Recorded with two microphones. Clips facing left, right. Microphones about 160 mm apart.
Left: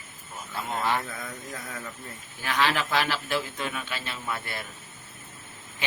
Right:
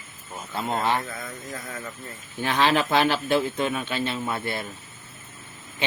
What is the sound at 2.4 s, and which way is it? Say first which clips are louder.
Speech: right 5 dB; 25° right (ahead or behind).